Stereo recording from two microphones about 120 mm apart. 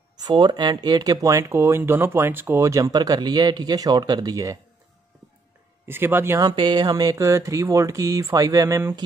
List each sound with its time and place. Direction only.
0.2 s speech: 35° right (ahead or behind)
5.9 s speech: 20° right (ahead or behind)
6.4 s speech: 40° right (ahead or behind)